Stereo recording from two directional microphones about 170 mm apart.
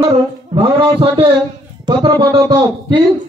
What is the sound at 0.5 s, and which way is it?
A man's voice, 30° right (ahead or behind).